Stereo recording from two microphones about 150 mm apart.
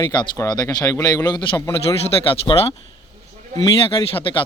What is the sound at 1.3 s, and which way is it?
Speech, 30° left (ahead or behind).